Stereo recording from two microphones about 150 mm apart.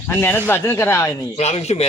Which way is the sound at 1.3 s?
45° left (ahead or behind).